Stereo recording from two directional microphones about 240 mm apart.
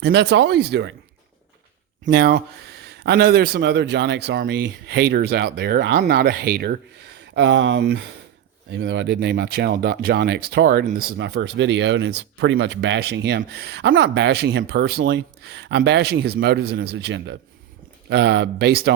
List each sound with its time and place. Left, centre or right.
0.0 s speech: right
2.0 s speech: right